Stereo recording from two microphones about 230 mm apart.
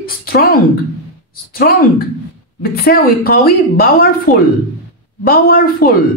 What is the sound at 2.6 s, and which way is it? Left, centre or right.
Speech, left.